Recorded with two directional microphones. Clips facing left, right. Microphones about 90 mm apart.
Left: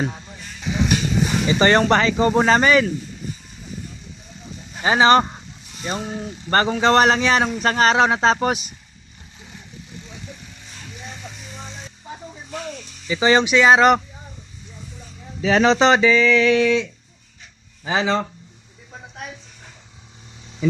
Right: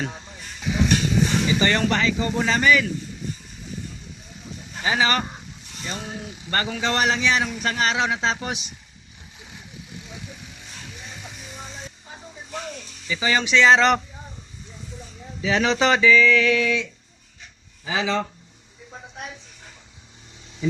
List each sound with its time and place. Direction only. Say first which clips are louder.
1.5 s speech: left 5 dB; 40° left (ahead or behind)
4.8 s speech: left 8 dB; 35° left (ahead or behind)
5.8 s a man's voice: left 6 dB; 40° left (ahead or behind)
13.1 s speech: left 7 dB; 30° left (ahead or behind)
13.4 s speech: even; 15° left (ahead or behind)
15.4 s a man's voice: left 6 dB; 45° left (ahead or behind)
15.7 s a sound: right 1 dB; 30° left (ahead or behind)
17.8 s speech: left 4 dB; 40° left (ahead or behind)